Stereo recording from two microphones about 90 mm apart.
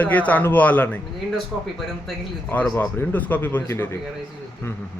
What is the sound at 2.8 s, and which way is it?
Speech, 20° left (ahead or behind).